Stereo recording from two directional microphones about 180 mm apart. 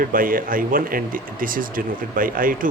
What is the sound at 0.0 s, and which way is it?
Speech, 50° right (ahead or behind).